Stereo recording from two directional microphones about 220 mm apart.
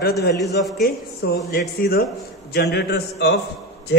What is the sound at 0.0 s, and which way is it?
Speech, 45° left (ahead or behind).